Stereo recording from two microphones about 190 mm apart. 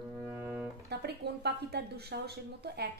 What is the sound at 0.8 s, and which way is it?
Speech, 60° right (ahead or behind).